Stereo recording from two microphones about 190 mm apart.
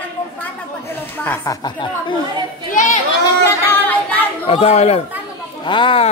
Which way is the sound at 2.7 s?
40° left (ahead or behind).